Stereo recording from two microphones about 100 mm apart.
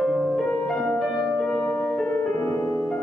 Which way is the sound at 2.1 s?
20° left (ahead or behind).